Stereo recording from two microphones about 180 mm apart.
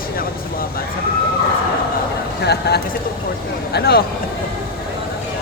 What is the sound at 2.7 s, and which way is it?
Speech, 65° left (ahead or behind).